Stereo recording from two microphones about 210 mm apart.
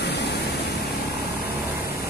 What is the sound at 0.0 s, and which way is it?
Vehicle, 55° left (ahead or behind).